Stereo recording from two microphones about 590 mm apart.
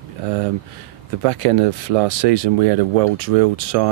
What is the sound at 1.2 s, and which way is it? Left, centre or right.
Speech, right.